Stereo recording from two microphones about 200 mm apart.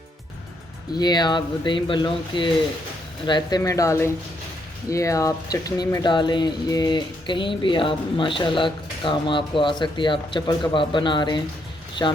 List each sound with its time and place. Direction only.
0.9 s speech: 20° left (ahead or behind)